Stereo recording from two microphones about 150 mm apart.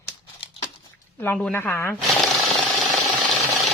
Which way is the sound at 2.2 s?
Centre (ahead or behind).